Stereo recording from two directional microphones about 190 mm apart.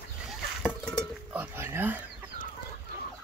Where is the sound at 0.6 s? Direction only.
Centre (ahead or behind).